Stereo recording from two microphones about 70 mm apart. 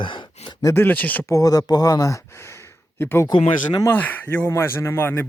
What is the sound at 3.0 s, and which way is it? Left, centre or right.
Speech, left.